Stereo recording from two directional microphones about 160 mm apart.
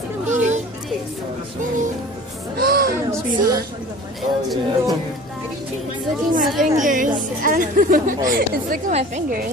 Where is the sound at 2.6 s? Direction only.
70° right (ahead or behind).